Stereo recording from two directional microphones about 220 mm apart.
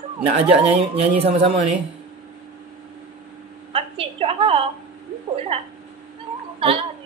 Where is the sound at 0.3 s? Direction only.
30° right (ahead or behind).